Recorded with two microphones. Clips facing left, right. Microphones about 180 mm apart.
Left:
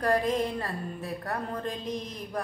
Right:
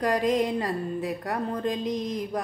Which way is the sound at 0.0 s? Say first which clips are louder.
Right 2 dB; 15° right (ahead or behind).